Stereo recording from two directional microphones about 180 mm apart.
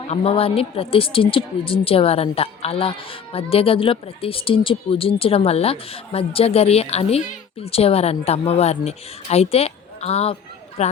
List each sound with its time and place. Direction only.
0.1 s a woman's voice: 30° left (ahead or behind)